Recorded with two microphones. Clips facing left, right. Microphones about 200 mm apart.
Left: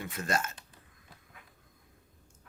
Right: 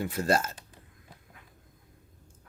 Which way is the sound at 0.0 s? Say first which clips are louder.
Right 6 dB; 35° right (ahead or behind).